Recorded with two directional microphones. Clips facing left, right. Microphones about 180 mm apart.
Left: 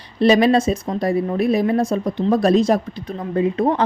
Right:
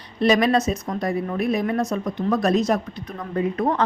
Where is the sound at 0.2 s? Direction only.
30° left (ahead or behind).